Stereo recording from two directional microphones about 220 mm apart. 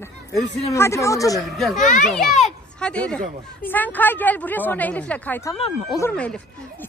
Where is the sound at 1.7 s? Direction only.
35° left (ahead or behind).